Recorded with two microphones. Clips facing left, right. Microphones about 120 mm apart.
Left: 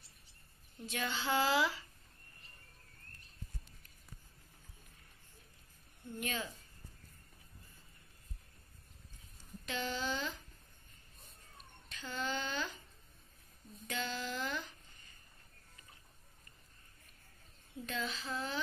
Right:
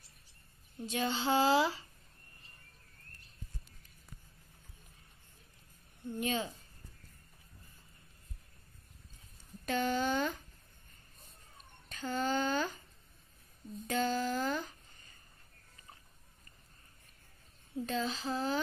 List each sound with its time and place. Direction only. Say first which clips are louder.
0.8 s female singing: right 5 dB; 25° right (ahead or behind)
6.1 s female singing: right 6 dB; 25° right (ahead or behind)
9.7 s speech: right 7 dB; 50° right (ahead or behind)
11.9 s speech: right 6 dB; 45° right (ahead or behind)
13.8 s speech: right 8 dB; 45° right (ahead or behind)
17.7 s a child's voice: right 6 dB; 35° right (ahead or behind)